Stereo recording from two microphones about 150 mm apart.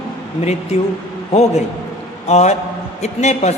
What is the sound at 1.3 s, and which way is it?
A man's voice, 45° left (ahead or behind).